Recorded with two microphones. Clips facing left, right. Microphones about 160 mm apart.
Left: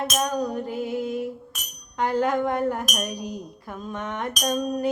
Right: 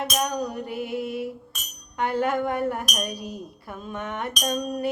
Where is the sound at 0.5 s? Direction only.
5° right (ahead or behind).